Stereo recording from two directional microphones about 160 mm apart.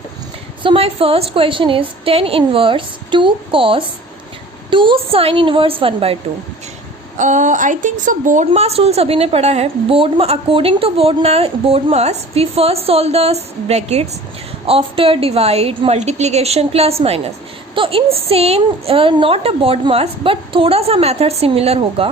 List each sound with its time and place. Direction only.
0.6 s a woman's voice: 35° right (ahead or behind)
7.2 s a woman's voice: 50° right (ahead or behind)